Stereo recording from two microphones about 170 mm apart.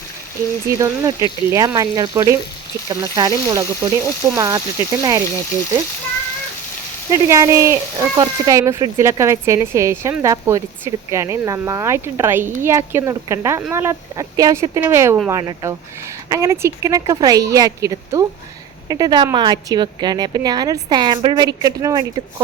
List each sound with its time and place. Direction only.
0.8 s a woman's voice: 20° right (ahead or behind)
7.1 s a woman's voice: 20° right (ahead or behind)